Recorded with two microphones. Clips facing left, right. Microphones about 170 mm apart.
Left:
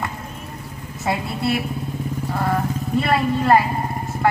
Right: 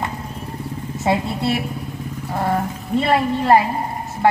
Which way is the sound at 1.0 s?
25° right (ahead or behind).